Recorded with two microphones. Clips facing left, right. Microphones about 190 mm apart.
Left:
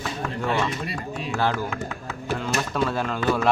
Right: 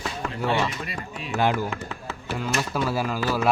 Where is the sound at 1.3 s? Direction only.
15° right (ahead or behind).